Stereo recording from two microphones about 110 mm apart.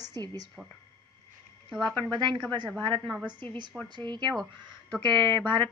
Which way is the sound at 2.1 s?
45° right (ahead or behind).